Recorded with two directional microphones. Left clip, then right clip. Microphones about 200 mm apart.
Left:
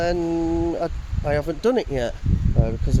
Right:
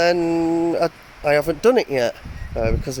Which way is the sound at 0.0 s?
15° right (ahead or behind).